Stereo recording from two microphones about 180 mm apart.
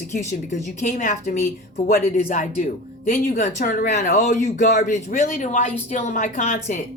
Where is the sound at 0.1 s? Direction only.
40° left (ahead or behind).